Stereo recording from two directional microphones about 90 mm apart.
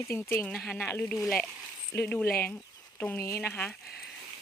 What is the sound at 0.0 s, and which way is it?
Speech, 30° left (ahead or behind).